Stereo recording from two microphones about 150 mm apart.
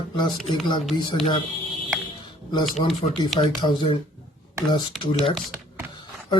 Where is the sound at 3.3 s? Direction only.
30° left (ahead or behind).